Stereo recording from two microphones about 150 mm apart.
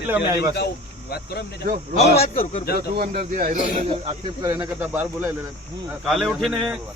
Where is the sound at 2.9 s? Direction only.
75° right (ahead or behind); by 3.5 s 60° right (ahead or behind).